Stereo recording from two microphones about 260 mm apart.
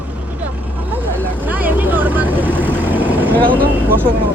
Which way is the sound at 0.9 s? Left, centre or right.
Centre.